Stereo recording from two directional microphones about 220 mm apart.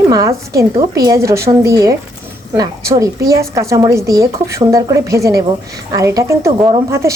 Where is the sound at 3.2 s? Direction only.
15° right (ahead or behind).